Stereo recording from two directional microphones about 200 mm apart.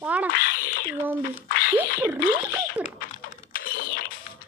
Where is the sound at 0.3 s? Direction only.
50° left (ahead or behind).